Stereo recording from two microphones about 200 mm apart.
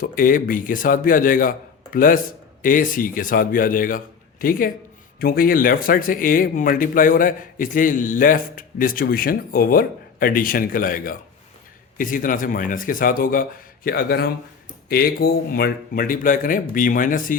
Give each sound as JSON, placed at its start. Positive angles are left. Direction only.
{"t": 0.0, "sound": "speech", "side_deg": 45}